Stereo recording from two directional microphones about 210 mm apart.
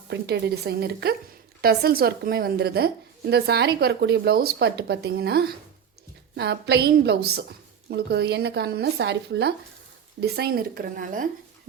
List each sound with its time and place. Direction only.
0.1 s a woman's voice: 50° right (ahead or behind)